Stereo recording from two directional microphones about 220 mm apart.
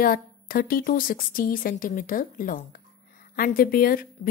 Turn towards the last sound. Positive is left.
turn(degrees=40)  # may be behind; listen again after turning